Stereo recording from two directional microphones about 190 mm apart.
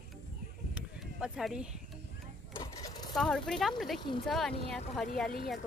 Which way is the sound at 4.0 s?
25° left (ahead or behind).